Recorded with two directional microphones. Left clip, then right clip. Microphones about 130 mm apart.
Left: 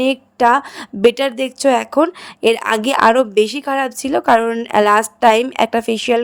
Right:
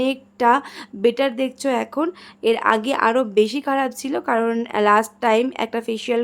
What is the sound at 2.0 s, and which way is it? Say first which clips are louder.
A woman's voice: left 6 dB; 55° left (ahead or behind).